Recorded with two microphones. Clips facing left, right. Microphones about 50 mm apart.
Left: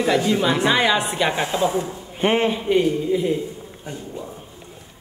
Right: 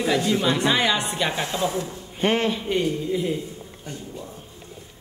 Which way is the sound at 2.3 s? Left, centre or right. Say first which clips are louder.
Left 5 dB; left.